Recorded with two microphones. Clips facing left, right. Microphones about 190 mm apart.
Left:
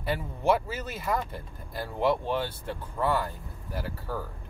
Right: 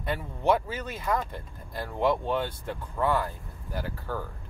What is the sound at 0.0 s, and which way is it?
Speech, 5° left (ahead or behind).